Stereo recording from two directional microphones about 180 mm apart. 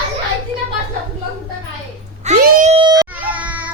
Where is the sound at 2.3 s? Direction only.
45° right (ahead or behind).